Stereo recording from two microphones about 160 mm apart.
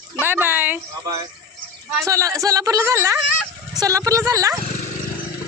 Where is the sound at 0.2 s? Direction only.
15° right (ahead or behind).